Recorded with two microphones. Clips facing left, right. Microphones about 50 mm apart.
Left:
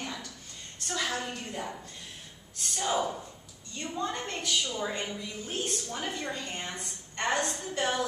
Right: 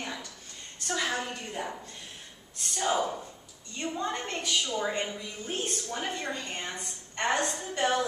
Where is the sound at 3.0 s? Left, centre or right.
Centre.